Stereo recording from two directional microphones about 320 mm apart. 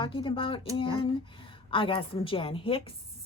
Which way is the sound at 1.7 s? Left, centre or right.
Centre.